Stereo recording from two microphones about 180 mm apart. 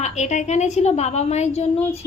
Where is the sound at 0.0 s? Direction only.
40° left (ahead or behind).